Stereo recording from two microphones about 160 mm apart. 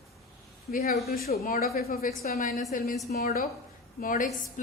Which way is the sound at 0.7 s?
65° left (ahead or behind).